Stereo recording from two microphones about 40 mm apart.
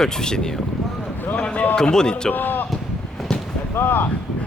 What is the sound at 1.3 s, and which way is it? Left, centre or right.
Speech, left.